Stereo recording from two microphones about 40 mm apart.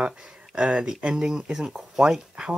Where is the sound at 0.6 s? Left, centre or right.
Right.